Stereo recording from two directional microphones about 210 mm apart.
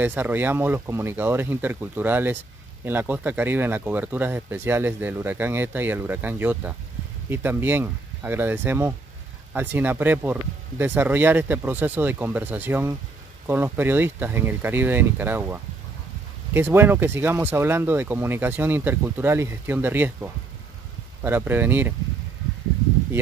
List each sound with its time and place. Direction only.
0.0 s speech: 10° right (ahead or behind)